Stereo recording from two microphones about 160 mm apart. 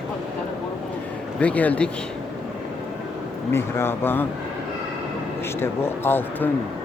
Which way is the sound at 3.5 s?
15° left (ahead or behind).